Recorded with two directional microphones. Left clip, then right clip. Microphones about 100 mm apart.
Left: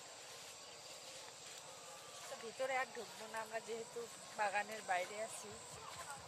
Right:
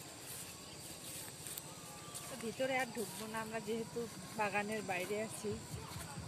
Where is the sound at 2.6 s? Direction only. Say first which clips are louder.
Right 3 dB; 10° left (ahead or behind).